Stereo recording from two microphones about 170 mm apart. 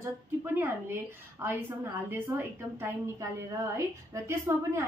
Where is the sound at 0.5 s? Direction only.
10° right (ahead or behind).